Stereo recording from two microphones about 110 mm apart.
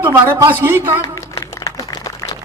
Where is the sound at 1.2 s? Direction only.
30° left (ahead or behind).